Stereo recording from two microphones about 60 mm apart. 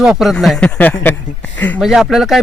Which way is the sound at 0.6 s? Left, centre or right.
Left.